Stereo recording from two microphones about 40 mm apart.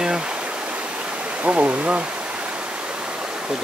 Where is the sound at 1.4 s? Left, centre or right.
Right.